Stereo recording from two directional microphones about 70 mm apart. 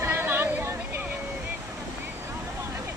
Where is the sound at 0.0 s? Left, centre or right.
Right.